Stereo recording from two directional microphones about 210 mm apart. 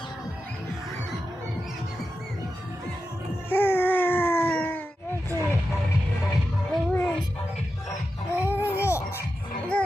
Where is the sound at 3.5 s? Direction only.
10° left (ahead or behind).